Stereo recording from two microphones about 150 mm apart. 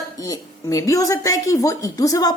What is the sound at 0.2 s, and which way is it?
A woman's voice, 20° left (ahead or behind).